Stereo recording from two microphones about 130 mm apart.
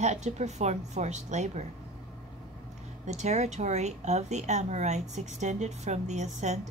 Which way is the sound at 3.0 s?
60° right (ahead or behind).